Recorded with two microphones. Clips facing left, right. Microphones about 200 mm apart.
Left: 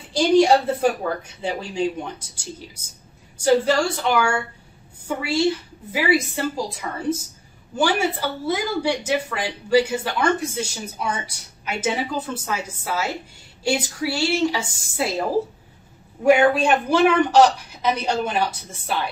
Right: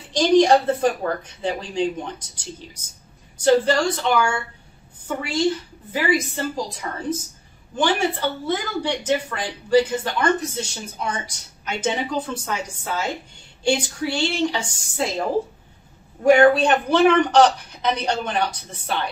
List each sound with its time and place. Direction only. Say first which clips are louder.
0.1 s a woman's voice: even; 10° left (ahead or behind)
16.3 s speech: right 2 dB; 5° left (ahead or behind)